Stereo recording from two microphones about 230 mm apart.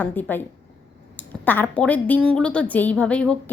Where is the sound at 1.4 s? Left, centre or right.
Centre.